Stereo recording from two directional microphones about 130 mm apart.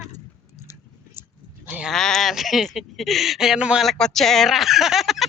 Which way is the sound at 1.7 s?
10° right (ahead or behind).